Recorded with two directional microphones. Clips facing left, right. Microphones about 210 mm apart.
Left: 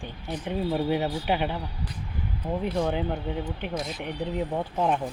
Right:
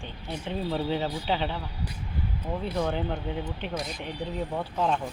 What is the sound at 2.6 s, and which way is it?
Speech, 15° left (ahead or behind).